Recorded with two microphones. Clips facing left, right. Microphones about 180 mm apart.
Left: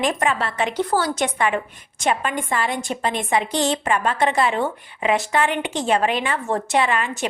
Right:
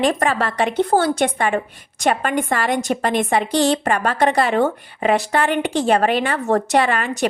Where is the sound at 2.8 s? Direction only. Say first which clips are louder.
Right 5 dB; 55° right (ahead or behind).